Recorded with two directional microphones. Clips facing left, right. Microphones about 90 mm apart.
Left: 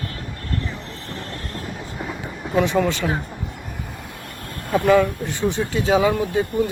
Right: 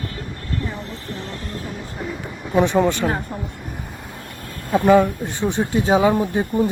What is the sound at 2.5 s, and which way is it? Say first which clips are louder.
Speech: right 2 dB; 20° right (ahead or behind).